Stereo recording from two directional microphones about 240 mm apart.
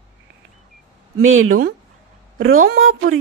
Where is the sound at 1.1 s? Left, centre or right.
Right.